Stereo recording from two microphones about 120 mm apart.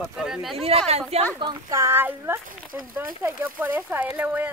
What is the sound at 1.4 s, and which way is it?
Speech, 35° right (ahead or behind).